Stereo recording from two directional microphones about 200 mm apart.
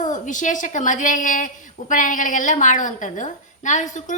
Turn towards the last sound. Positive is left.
turn(degrees=40)  # may be behind; listen again after turning